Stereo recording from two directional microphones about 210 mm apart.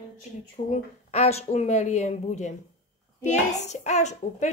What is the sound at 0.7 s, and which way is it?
Speech, 30° left (ahead or behind).